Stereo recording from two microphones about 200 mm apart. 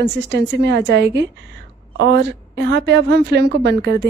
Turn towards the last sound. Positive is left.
turn(degrees=-55)  # may be behind; listen again after turning